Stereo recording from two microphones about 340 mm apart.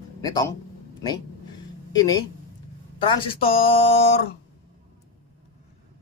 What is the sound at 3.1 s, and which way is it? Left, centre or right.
Speech, centre.